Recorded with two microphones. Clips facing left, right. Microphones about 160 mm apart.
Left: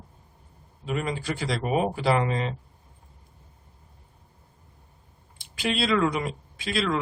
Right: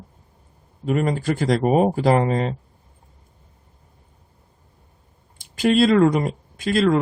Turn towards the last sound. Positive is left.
turn(degrees=-45)  # may be behind; listen again after turning